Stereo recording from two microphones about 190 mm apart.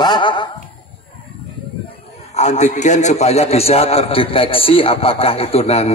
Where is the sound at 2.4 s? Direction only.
35° left (ahead or behind).